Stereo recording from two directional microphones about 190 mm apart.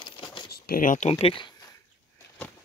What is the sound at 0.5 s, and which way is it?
Speech, 50° left (ahead or behind).